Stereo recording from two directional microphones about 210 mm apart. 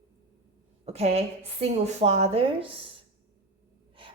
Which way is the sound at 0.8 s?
30° right (ahead or behind).